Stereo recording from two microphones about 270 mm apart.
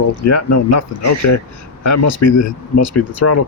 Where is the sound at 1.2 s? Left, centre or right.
Left.